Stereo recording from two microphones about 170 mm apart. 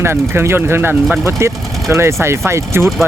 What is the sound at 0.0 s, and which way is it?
Speech, 15° right (ahead or behind).